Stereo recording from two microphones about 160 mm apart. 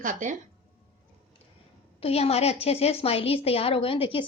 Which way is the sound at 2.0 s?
40° left (ahead or behind).